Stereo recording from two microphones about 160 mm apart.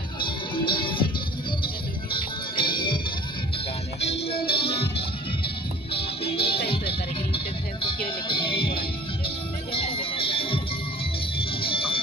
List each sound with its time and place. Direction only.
0.2 s music: 30° left (ahead or behind)
2.1 s music: 30° left (ahead or behind)
4.0 s music: 40° left (ahead or behind)
11.6 s music: 35° left (ahead or behind)